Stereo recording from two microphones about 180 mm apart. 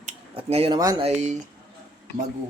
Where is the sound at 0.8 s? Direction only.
20° right (ahead or behind).